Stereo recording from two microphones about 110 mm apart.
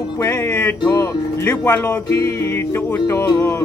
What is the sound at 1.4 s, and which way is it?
Speech, 20° left (ahead or behind).